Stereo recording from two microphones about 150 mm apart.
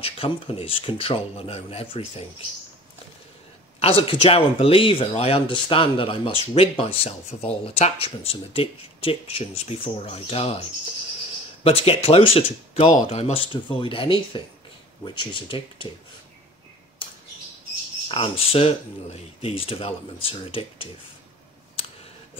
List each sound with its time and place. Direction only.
0.0 s speech: 35° left (ahead or behind)
3.8 s speech: 40° left (ahead or behind)
11.6 s speech: 40° left (ahead or behind)
18.0 s speech: 40° left (ahead or behind)